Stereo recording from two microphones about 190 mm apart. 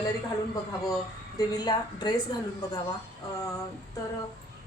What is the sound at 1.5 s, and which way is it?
A woman's voice, 20° left (ahead or behind).